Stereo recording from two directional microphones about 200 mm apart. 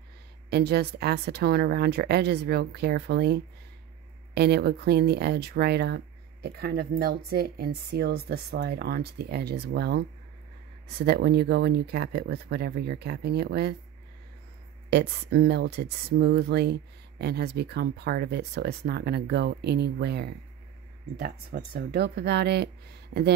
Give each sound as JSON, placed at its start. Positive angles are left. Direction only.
{"t": 0.5, "sound": "speech", "side_deg": -55}
{"t": 14.9, "sound": "speech", "side_deg": -55}